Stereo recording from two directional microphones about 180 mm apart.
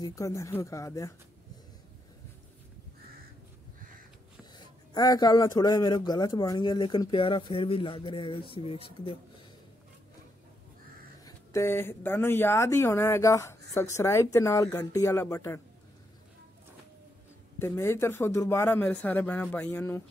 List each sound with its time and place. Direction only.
0.0 s speech: 15° left (ahead or behind)
4.9 s speech: 20° left (ahead or behind)
11.2 s speech: 15° left (ahead or behind)
17.6 s speech: 15° left (ahead or behind)